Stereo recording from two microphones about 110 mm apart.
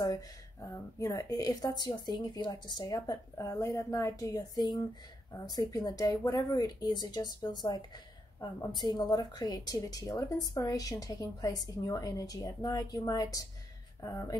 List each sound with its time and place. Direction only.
0.0 s a woman's voice: 30° left (ahead or behind)